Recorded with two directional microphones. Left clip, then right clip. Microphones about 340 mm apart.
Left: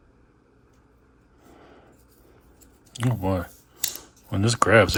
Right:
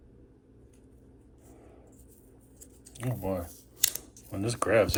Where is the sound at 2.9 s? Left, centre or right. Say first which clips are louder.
Left 7 dB; left.